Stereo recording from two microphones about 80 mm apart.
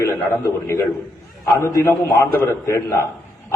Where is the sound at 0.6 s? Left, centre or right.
Left.